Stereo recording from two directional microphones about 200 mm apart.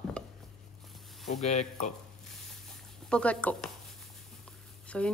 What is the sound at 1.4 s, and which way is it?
Speech, 35° left (ahead or behind).